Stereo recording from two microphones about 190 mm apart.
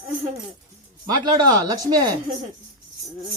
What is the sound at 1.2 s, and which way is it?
Speech, 20° right (ahead or behind).